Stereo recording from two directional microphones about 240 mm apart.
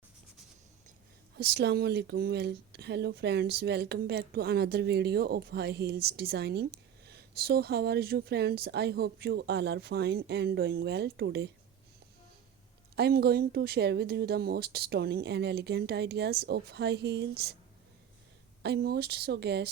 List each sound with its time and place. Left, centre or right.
1.4 s speech: right
13.0 s speech: right
18.6 s speech: right